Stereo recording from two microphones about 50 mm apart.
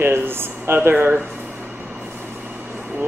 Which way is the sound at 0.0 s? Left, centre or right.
Right.